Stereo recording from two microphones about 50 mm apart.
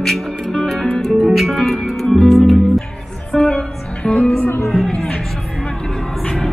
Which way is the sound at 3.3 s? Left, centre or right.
Centre.